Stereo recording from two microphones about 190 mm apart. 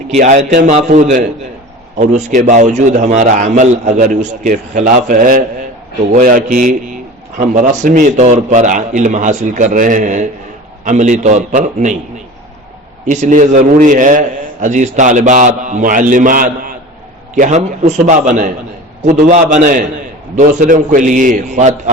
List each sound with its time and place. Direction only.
0.2 s a man's voice: 40° right (ahead or behind)
13.1 s a man's voice: 40° right (ahead or behind)